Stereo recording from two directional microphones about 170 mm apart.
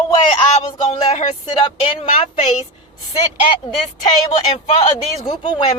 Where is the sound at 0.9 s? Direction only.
40° left (ahead or behind).